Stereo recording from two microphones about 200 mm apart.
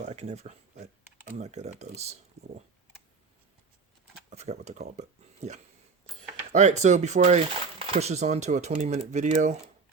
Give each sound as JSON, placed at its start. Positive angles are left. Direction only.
{"t": 0.0, "sound": "speech", "side_deg": -35}
{"t": 4.3, "sound": "speech", "side_deg": -35}